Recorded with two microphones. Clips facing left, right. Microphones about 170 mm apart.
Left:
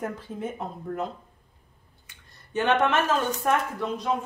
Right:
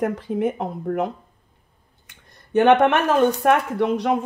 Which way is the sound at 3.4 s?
70° right (ahead or behind).